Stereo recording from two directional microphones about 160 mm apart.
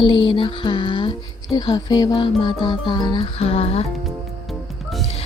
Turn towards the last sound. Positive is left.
turn(degrees=0)  # may be behind; listen again after turning